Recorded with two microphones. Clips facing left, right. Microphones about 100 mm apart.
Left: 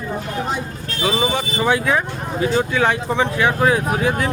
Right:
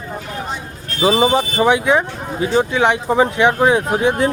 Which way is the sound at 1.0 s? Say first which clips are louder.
Right 6 dB; 30° right (ahead or behind).